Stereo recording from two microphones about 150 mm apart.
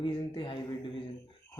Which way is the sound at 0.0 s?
35° left (ahead or behind).